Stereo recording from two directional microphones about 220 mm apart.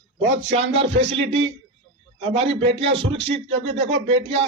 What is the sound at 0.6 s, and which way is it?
Music, 55° right (ahead or behind).